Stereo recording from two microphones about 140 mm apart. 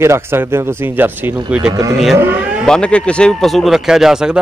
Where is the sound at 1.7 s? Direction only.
25° right (ahead or behind).